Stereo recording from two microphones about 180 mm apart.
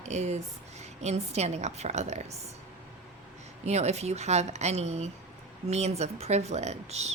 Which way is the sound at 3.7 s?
35° right (ahead or behind).